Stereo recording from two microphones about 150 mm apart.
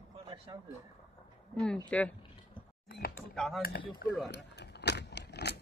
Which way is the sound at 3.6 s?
90° left.